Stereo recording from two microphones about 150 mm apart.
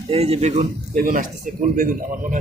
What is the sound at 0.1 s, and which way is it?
A man's voice, 45° right (ahead or behind).